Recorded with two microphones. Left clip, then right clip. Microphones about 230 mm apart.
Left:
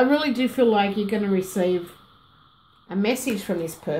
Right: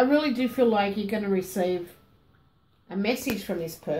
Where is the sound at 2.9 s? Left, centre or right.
Left.